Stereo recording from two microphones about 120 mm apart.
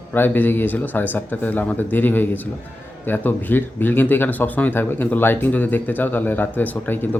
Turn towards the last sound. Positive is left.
turn(degrees=15)  # may be behind; listen again after turning